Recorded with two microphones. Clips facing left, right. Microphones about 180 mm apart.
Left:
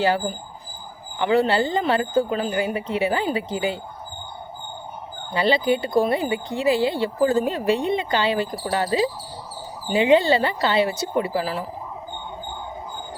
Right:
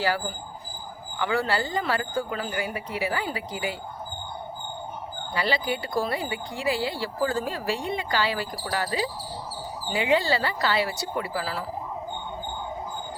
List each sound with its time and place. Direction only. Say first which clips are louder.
0.0 s speech: left 6 dB; 20° left (ahead or behind)
5.3 s speech: left 7 dB; 25° left (ahead or behind)